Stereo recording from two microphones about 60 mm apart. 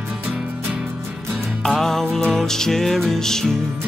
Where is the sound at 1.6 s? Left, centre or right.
Centre.